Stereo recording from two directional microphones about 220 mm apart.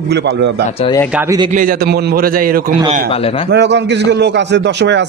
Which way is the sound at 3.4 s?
50° right (ahead or behind).